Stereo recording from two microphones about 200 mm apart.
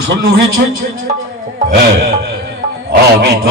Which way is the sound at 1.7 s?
50° right (ahead or behind).